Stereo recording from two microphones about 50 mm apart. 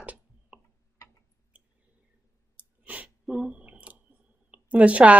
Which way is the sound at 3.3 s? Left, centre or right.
Centre.